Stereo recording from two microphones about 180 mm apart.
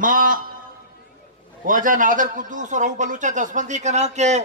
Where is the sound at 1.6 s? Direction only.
50° right (ahead or behind).